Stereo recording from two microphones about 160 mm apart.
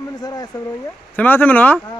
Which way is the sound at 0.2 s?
25° left (ahead or behind).